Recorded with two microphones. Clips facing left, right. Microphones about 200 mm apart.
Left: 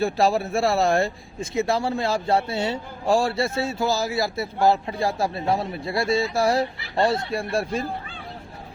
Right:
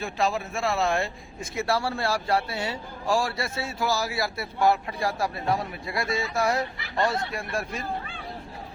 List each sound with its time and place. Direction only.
0.0 s speech: 35° left (ahead or behind)
1.4 s a man's voice: 20° left (ahead or behind)